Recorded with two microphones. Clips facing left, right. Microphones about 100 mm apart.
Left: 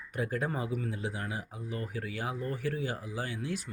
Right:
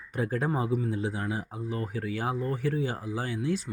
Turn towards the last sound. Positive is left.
turn(degrees=-30)  # may be behind; listen again after turning